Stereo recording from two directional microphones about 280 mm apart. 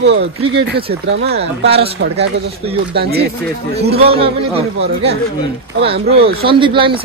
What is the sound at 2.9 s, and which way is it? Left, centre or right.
Speech, right.